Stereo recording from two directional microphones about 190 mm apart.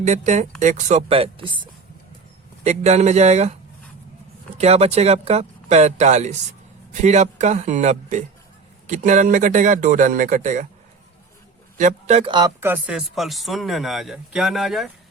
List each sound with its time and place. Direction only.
0.0 s speech: 40° right (ahead or behind)
2.6 s speech: 35° right (ahead or behind)
4.5 s speech: 35° right (ahead or behind)
11.8 s speech: 40° right (ahead or behind)
12.3 s speech: 20° right (ahead or behind); by 14.8 s centre (ahead or behind)